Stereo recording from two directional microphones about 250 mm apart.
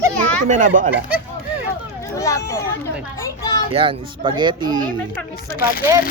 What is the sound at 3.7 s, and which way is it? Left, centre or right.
Speech, right.